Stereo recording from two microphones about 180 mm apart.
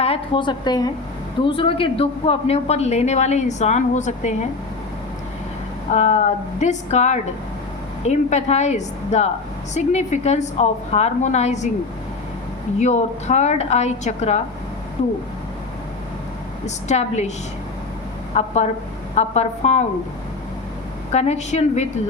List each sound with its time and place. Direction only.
0.0 s a woman's voice: 30° left (ahead or behind)
5.9 s a man's voice: 40° left (ahead or behind)
12.8 s a man's voice: 40° left (ahead or behind)
16.6 s a man's voice: 40° left (ahead or behind)
18.3 s a man's voice: 40° left (ahead or behind)
21.1 s a man's voice: 35° left (ahead or behind)